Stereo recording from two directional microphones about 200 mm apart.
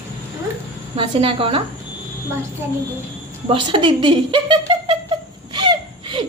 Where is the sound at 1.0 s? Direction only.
25° right (ahead or behind).